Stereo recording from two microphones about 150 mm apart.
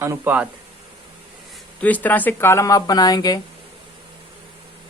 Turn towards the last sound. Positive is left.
turn(degrees=25)  # may be behind; listen again after turning